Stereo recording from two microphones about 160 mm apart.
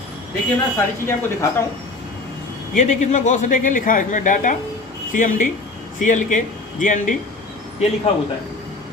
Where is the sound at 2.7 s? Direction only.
50° left (ahead or behind).